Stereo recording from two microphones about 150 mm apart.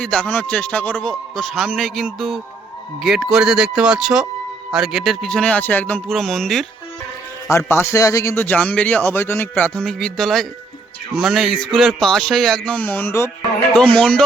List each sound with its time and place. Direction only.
0.0 s speech: 5° left (ahead or behind)
7.5 s speech: 15° left (ahead or behind)